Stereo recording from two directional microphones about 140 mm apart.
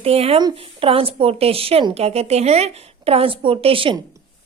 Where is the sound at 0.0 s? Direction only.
45° right (ahead or behind).